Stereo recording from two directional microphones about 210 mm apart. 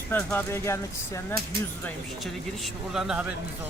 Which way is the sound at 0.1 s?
10° left (ahead or behind).